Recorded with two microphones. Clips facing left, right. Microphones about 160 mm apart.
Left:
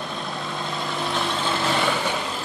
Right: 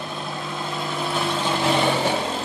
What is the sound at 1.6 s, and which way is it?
Vehicle, 15° right (ahead or behind).